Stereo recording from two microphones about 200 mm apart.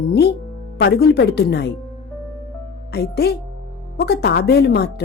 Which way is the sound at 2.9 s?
55° left (ahead or behind).